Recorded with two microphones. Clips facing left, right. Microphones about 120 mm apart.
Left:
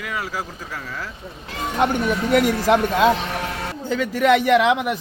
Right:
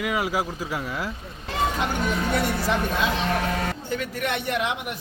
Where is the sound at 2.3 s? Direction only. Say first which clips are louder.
Left 11 dB; 90° left.